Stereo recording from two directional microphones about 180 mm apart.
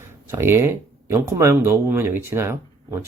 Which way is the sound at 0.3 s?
15° right (ahead or behind).